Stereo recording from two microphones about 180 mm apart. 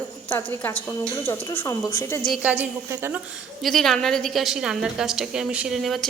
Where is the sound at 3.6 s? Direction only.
Centre (ahead or behind).